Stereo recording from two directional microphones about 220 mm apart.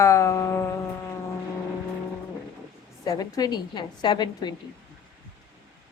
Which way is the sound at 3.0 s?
15° left (ahead or behind).